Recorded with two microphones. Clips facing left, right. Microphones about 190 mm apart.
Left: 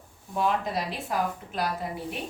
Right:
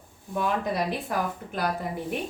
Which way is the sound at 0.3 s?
55° right (ahead or behind).